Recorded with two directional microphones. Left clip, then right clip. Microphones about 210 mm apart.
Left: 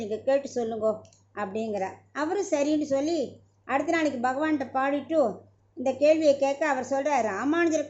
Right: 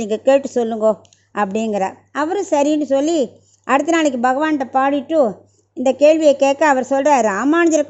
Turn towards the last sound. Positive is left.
turn(degrees=-45)  # may be behind; listen again after turning